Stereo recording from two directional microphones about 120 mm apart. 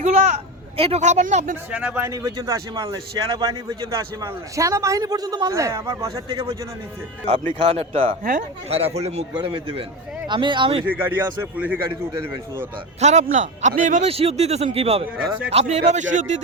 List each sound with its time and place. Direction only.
0.0 s speech: 65° right (ahead or behind); by 1.5 s 80° right
1.7 s a man's voice: 10° right (ahead or behind)
2.0 s speech: 30° right (ahead or behind)
2.7 s a man's voice: 40° right (ahead or behind)
7.6 s speech: 55° right (ahead or behind)
9.4 s a man's voice: 45° right (ahead or behind)
10.8 s a man's voice: 15° right (ahead or behind)
13.0 s a man's voice: 80° right
14.1 s speech: 60° right (ahead or behind)
15.5 s speech: 70° right (ahead or behind); by 16.4 s 90° right